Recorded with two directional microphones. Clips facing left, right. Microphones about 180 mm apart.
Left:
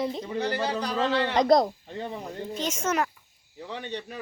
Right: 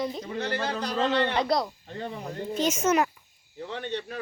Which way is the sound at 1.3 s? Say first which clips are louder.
Left 6 dB; 45° left (ahead or behind).